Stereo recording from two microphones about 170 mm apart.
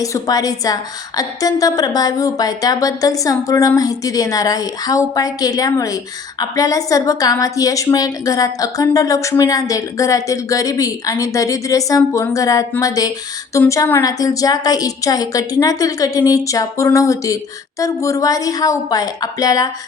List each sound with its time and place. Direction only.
0.0 s a woman's voice: 20° left (ahead or behind)